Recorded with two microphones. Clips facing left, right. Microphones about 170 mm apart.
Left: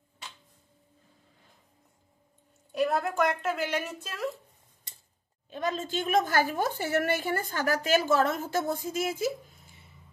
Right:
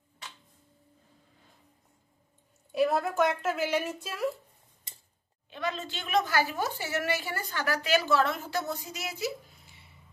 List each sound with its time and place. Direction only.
2.7 s a woman's voice: 5° right (ahead or behind)
5.5 s a woman's voice: 45° left (ahead or behind)